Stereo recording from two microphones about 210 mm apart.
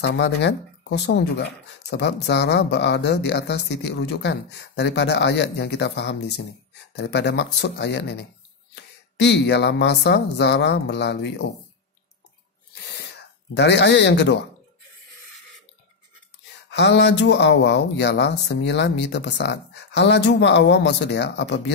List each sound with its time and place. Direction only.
0.0 s speech: 55° left (ahead or behind)
13.6 s speech: 55° left (ahead or behind)
16.7 s speech: 55° left (ahead or behind)